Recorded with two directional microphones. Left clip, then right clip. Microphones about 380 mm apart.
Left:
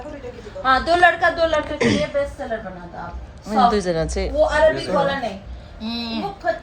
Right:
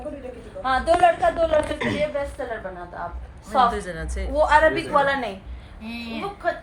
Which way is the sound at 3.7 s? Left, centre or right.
Centre.